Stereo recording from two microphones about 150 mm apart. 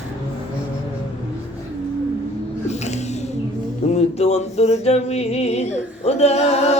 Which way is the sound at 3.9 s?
45° left (ahead or behind).